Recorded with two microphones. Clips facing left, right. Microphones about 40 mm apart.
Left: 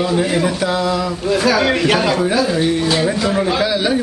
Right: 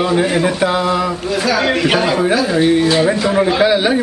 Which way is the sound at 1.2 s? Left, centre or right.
Centre.